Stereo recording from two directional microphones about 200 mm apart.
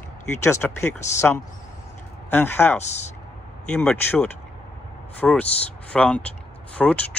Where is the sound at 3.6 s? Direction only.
5° left (ahead or behind).